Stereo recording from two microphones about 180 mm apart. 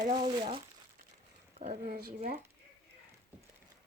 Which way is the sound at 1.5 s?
40° right (ahead or behind).